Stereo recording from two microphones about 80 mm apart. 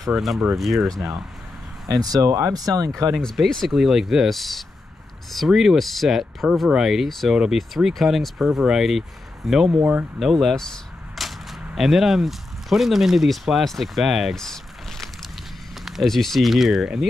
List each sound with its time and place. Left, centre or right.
0.1 s speech: centre
0.9 s speech: right
3.2 s speech: centre